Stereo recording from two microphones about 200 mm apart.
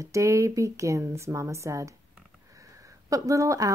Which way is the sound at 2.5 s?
15° right (ahead or behind).